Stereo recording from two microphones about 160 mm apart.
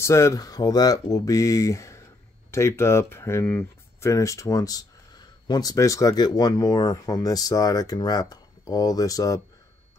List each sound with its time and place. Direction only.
0.0 s speech: 20° left (ahead or behind)